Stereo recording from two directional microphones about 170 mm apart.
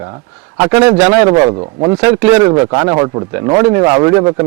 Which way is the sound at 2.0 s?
10° right (ahead or behind).